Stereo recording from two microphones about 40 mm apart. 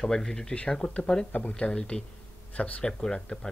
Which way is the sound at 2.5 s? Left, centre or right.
Left.